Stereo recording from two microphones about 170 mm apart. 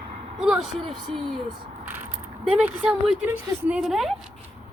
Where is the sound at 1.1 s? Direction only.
30° right (ahead or behind).